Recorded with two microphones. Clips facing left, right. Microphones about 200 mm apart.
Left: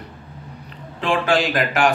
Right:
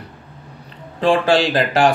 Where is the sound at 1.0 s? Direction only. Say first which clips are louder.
Right 4 dB; 35° right (ahead or behind).